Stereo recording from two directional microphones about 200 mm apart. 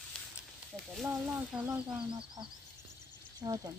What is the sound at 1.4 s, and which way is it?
Speech, 5° right (ahead or behind).